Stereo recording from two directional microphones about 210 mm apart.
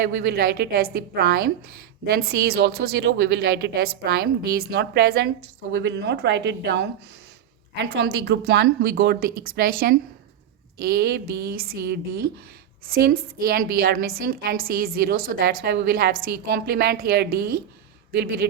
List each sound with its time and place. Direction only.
0.0 s speech: 55° right (ahead or behind)
7.9 s speech: 55° right (ahead or behind)